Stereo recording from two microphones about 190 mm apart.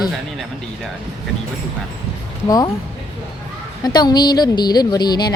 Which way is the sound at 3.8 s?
20° left (ahead or behind).